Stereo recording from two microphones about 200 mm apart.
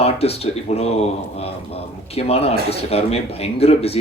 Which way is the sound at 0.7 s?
30° left (ahead or behind).